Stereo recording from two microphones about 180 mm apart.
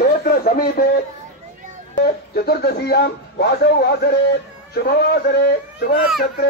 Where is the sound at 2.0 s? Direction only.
60° left (ahead or behind).